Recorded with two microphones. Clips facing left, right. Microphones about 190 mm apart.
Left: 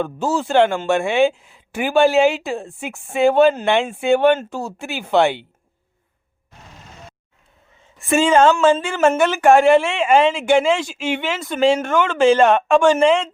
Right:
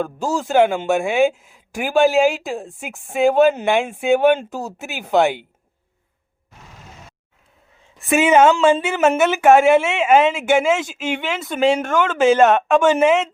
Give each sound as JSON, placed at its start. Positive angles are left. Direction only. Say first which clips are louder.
{"t": 0.0, "sound": "speech", "louder": "left 1 dB", "side_deg": 0}
{"t": 8.1, "sound": "speech", "louder": "right 1 dB", "side_deg": -15}